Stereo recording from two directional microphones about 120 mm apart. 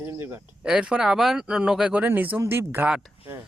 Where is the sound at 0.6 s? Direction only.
10° right (ahead or behind).